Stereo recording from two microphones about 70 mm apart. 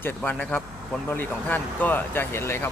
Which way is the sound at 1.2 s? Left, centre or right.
Left.